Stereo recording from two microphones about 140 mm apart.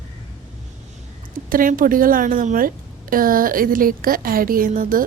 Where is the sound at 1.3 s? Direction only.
80° right.